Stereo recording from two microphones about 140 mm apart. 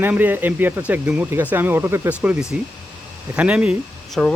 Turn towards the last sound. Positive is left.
turn(degrees=5)  # may be behind; listen again after turning